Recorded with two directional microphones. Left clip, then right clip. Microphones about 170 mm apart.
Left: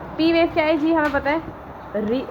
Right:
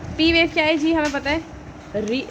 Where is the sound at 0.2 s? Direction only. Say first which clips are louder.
Right 1 dB; 30° right (ahead or behind).